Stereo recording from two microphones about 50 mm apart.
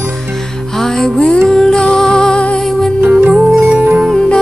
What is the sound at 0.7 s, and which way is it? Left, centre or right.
Music, centre.